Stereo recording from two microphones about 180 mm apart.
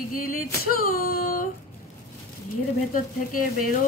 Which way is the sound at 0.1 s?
55° left (ahead or behind).